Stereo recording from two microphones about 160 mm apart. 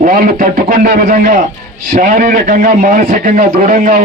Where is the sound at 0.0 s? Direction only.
60° right (ahead or behind).